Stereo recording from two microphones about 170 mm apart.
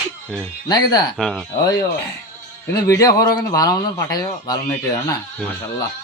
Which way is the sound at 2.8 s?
20° left (ahead or behind).